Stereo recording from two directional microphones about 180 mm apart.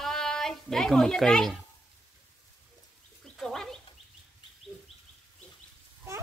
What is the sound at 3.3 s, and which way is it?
Dog, centre (ahead or behind).